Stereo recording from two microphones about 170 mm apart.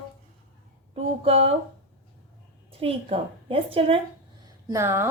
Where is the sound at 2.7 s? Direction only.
35° right (ahead or behind).